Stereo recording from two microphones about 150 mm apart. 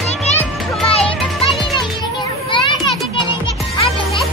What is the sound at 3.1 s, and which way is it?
Music, 35° left (ahead or behind).